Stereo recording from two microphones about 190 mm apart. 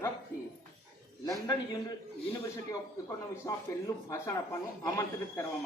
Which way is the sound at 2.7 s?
15° left (ahead or behind).